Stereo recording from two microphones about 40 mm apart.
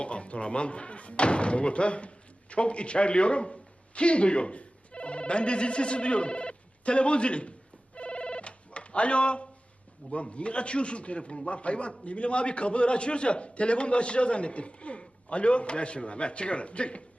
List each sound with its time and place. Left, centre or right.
0.0 s speech: left
7.9 s telephone bell ringing: left
10.1 s a man's voice: left